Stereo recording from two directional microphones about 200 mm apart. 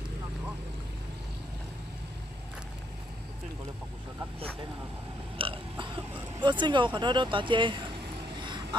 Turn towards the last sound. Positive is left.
turn(degrees=-25)  # may be behind; listen again after turning